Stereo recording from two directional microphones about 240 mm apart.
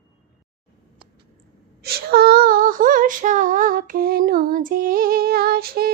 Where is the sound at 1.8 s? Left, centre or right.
Right.